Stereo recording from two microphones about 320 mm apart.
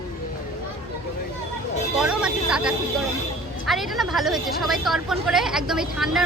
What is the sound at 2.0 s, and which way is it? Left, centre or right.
A woman's voice, centre.